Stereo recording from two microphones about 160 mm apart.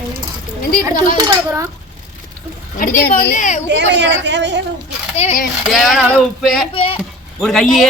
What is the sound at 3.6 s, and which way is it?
Speech, 90° right.